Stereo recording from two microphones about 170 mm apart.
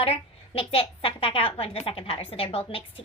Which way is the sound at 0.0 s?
35° left (ahead or behind).